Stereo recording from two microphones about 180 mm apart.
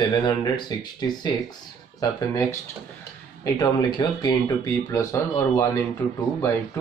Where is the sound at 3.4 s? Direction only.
25° left (ahead or behind).